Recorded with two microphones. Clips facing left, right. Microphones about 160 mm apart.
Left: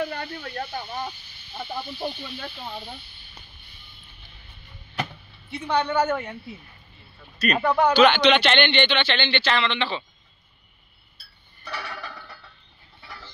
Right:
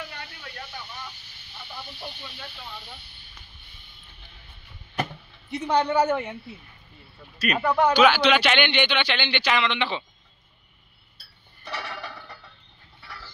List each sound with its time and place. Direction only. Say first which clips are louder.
0.0 s speech: left 10 dB; 45° left (ahead or behind)
5.5 s a woman's voice: right 1 dB; 35° right (ahead or behind)
5.9 s a man's voice: right 1 dB; 10° right (ahead or behind)
7.5 s a man's voice: left 1 dB; centre (ahead or behind); by 10.0 s 15° right (ahead or behind)